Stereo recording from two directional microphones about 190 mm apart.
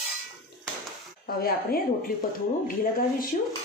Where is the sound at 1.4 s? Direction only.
50° left (ahead or behind).